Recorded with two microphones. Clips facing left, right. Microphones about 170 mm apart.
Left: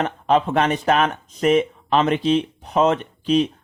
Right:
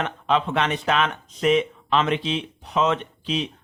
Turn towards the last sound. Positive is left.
turn(degrees=45)  # may be behind; listen again after turning